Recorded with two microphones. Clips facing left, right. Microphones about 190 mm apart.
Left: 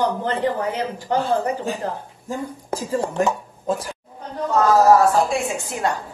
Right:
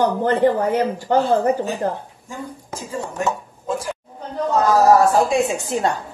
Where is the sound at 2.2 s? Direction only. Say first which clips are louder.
Left 4 dB; 35° left (ahead or behind).